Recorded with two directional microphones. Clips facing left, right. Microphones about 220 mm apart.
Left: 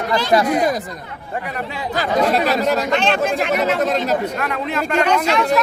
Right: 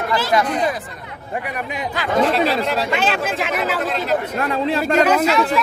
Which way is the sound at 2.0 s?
45° left (ahead or behind).